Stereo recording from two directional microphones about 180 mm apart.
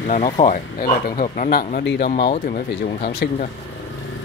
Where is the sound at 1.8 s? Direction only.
65° left (ahead or behind).